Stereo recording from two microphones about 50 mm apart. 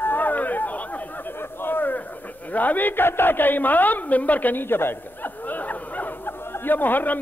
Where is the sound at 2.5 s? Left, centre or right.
Left.